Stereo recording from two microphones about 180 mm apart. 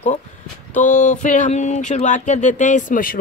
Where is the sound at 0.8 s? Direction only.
45° left (ahead or behind).